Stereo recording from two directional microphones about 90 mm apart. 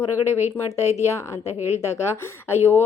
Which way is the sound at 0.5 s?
30° left (ahead or behind).